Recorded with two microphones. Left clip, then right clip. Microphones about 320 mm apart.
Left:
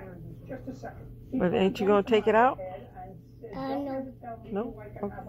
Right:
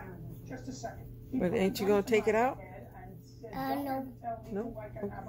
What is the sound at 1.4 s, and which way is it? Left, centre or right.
Speech, centre.